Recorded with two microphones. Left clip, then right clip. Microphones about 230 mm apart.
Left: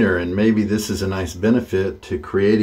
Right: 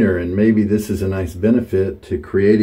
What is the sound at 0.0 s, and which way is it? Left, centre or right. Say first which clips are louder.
Speech: right 1 dB; left.